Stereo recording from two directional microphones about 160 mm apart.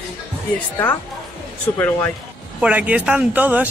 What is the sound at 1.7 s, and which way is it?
Speech, 15° left (ahead or behind).